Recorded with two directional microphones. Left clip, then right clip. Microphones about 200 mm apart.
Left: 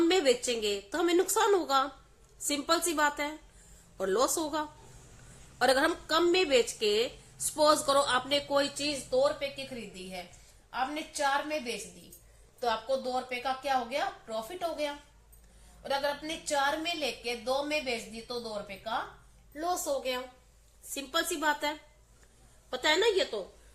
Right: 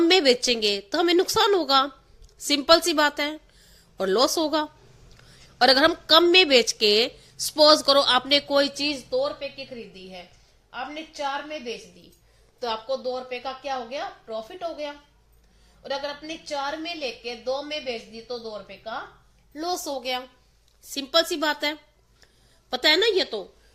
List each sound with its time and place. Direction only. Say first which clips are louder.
0.1 s a woman's voice: right 8 dB; 40° right (ahead or behind)
12.5 s a woman's voice: right 2 dB; 40° right (ahead or behind)
19.5 s a woman's voice: right 3 dB; 40° right (ahead or behind)